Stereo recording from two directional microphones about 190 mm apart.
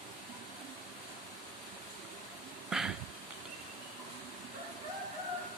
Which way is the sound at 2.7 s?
5° right (ahead or behind).